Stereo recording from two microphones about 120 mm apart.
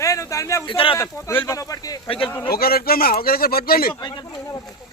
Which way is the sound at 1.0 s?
25° left (ahead or behind).